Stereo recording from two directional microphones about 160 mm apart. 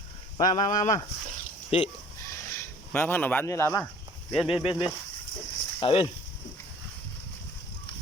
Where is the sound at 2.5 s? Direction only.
15° left (ahead or behind).